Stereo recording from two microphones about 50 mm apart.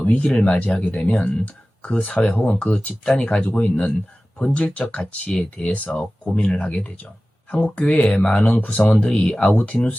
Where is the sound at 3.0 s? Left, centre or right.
Centre.